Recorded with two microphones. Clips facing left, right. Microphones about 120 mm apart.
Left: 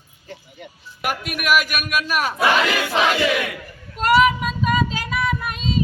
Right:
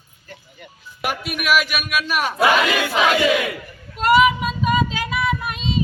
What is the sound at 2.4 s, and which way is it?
Battle cry, 15° right (ahead or behind).